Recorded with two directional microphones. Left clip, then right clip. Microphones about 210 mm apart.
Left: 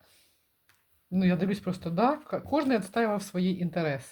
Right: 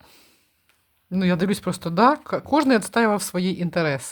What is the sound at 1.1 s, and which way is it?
Speech, 35° right (ahead or behind).